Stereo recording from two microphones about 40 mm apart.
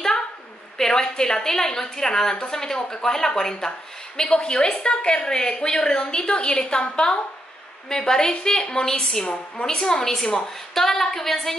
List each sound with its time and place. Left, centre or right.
0.7 s a woman's voice: centre
10.7 s a woman's voice: centre